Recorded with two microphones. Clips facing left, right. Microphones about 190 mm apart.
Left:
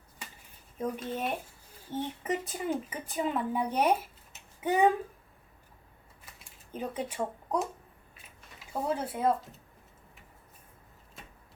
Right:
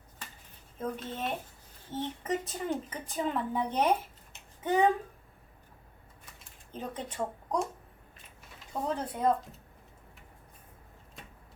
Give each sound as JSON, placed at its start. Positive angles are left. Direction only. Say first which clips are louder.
{"t": 0.8, "sound": "speech", "louder": "left 2 dB", "side_deg": 10}
{"t": 6.7, "sound": "speech", "louder": "left 4 dB", "side_deg": 10}